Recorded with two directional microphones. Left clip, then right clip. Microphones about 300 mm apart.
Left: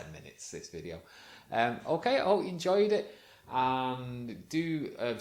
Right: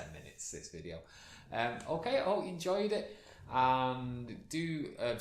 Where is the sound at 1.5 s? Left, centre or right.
Left.